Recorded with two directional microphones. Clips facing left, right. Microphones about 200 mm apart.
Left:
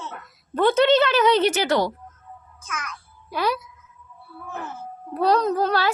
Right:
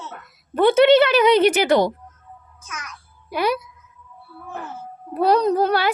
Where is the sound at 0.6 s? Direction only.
10° right (ahead or behind).